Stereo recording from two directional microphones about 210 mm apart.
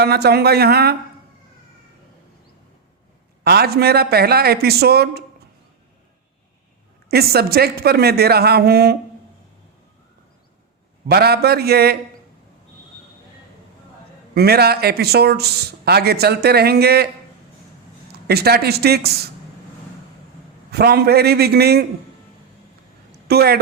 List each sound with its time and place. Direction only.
0.0 s speech: 50° right (ahead or behind)
3.4 s speech: 50° right (ahead or behind)
7.1 s speech: 50° right (ahead or behind)
11.1 s speech: 50° right (ahead or behind)
14.3 s speech: 50° right (ahead or behind)
18.1 s speech: 50° right (ahead or behind)
20.7 s speech: 50° right (ahead or behind)
23.3 s speech: 50° right (ahead or behind)